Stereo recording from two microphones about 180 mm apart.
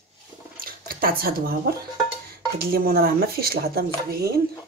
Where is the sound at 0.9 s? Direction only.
55° right (ahead or behind).